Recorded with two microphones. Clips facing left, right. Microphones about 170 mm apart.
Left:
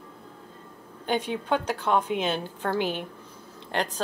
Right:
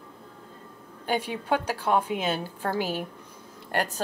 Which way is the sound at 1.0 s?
10° right (ahead or behind).